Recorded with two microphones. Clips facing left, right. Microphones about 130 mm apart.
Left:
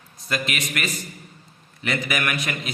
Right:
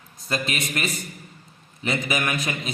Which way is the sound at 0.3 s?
30° right (ahead or behind).